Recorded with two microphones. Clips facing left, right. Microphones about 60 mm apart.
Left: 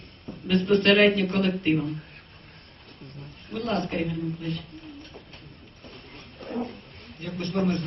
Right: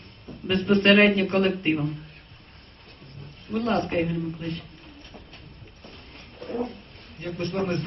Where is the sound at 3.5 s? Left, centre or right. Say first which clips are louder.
Right 3 dB; right.